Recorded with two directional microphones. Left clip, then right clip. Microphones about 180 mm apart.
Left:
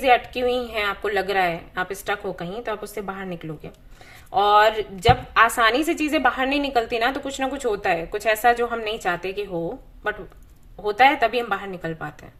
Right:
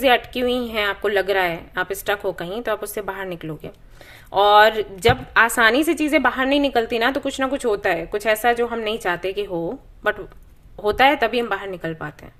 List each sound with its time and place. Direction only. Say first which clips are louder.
0.0 s a woman's voice: right 1 dB; 35° right (ahead or behind)